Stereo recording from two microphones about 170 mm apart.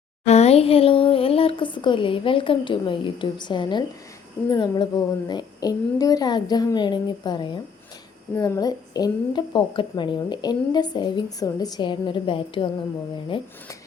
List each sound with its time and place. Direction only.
0.3 s a woman's voice: 40° left (ahead or behind)